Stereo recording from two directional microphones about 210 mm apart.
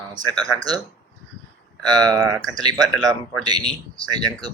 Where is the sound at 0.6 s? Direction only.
20° right (ahead or behind).